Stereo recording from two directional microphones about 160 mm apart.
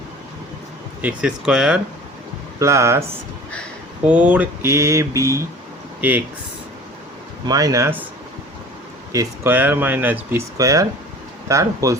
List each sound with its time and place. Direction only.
1.0 s speech: 5° right (ahead or behind)
2.6 s speech: 20° right (ahead or behind)
4.0 s speech: 10° right (ahead or behind)
7.4 s speech: 25° right (ahead or behind)
9.1 s speech: 15° right (ahead or behind)